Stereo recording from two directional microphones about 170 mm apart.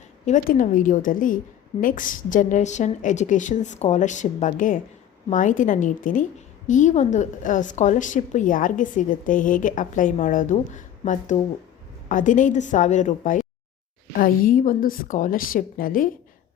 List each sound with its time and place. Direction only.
0.3 s a woman's voice: 50° left (ahead or behind)